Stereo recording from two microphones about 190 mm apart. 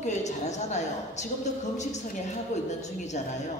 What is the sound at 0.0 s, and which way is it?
A woman's voice, 40° left (ahead or behind).